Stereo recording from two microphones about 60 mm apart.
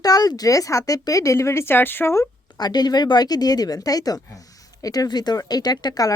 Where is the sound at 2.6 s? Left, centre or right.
Left.